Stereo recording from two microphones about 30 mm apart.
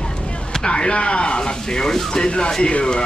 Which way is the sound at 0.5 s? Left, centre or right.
Left.